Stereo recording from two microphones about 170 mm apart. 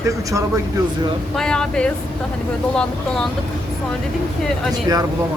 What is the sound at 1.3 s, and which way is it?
Speech, 5° left (ahead or behind).